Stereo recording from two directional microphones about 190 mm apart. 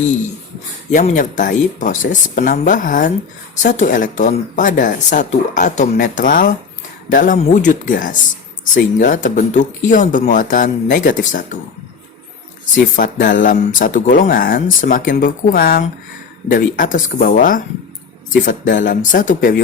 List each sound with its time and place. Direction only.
0.9 s speech: 40° left (ahead or behind)
12.7 s speech: 45° left (ahead or behind)